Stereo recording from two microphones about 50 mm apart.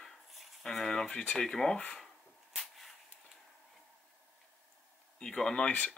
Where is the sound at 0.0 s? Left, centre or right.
Centre.